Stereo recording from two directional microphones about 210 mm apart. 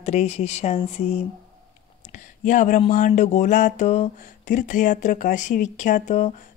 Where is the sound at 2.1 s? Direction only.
35° left (ahead or behind).